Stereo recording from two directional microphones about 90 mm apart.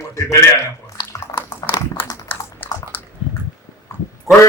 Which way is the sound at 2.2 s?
20° left (ahead or behind).